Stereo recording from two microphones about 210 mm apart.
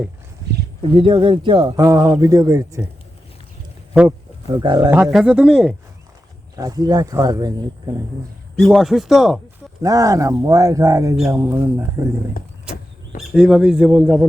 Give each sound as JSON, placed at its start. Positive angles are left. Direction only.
{"t": 0.8, "sound": "speech", "side_deg": -25}
{"t": 3.9, "sound": "wild animals", "side_deg": -5}
{"t": 4.5, "sound": "speech", "side_deg": -20}
{"t": 6.6, "sound": "speech", "side_deg": -20}
{"t": 8.5, "sound": "speech", "side_deg": 0}
{"t": 9.8, "sound": "speech", "side_deg": -15}
{"t": 13.2, "sound": "speech", "side_deg": -5}